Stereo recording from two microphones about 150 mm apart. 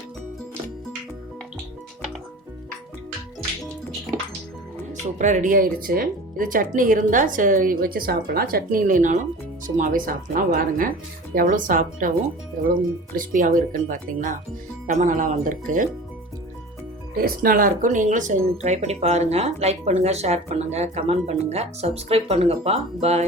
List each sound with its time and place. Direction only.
5.1 s speech: 55° right (ahead or behind)
13.1 s speech: 65° right (ahead or behind)
17.2 s speech: 75° right (ahead or behind); by 23.2 s 45° right (ahead or behind)